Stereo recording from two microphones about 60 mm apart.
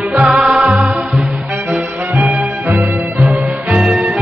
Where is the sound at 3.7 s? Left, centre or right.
Centre.